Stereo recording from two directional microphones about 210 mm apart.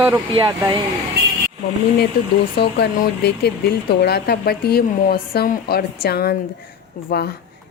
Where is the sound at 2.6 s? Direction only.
50° left (ahead or behind).